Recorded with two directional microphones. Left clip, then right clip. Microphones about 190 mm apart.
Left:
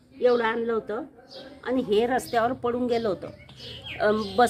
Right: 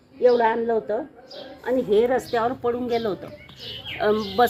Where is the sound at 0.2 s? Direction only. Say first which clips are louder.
Right 4 dB; 25° left (ahead or behind).